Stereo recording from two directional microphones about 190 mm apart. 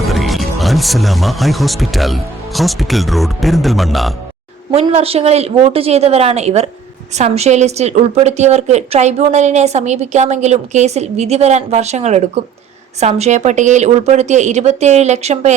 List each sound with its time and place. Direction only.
0.0 s speech: centre (ahead or behind)
4.7 s a woman's voice: 35° right (ahead or behind)